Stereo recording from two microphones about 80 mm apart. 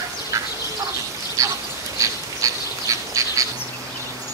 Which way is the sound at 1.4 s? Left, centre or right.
Right.